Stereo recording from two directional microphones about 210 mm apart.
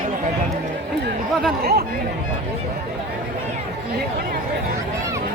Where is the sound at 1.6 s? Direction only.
50° right (ahead or behind).